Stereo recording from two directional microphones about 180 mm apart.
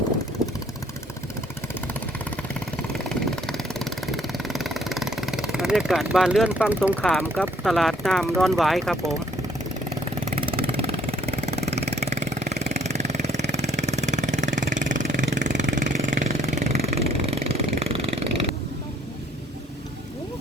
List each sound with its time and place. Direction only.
2.9 s vehicle: centre (ahead or behind)
7.0 s speech: 5° left (ahead or behind)
10.2 s vehicle: 30° right (ahead or behind)